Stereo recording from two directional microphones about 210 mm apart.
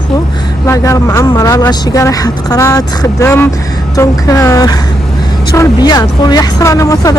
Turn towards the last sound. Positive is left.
turn(degrees=15)  # may be behind; listen again after turning